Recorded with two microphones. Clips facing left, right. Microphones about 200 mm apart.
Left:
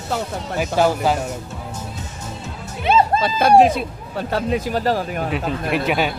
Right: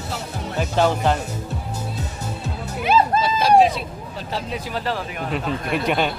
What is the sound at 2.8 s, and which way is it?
Music, 25° left (ahead or behind).